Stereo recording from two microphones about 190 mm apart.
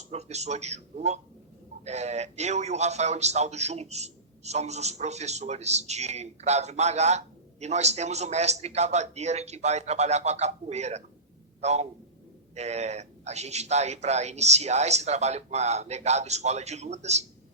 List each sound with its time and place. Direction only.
0.1 s a man's voice: 35° right (ahead or behind)